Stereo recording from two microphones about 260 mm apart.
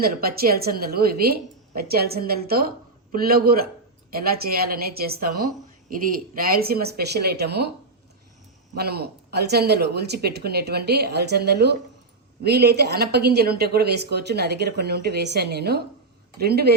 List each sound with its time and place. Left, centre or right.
0.0 s a woman's voice: right
8.7 s a woman's voice: right